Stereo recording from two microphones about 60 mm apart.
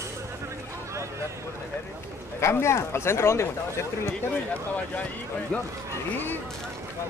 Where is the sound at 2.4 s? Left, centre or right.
Left.